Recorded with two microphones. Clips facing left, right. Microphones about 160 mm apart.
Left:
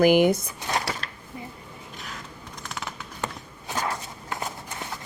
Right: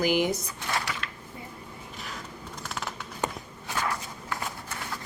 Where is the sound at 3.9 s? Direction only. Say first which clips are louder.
Left 1 dB; 20° left (ahead or behind).